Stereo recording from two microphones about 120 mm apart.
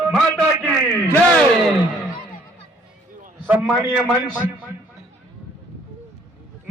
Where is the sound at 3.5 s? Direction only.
5° right (ahead or behind).